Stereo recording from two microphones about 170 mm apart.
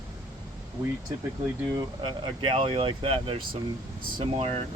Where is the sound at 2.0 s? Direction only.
30° right (ahead or behind).